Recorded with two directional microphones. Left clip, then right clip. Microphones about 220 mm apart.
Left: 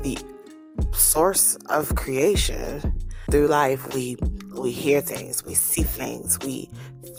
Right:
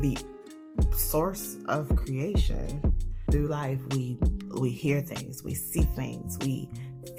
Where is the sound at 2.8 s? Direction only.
Centre (ahead or behind).